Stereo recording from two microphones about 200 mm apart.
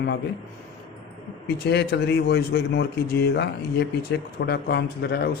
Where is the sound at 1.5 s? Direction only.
55° left (ahead or behind).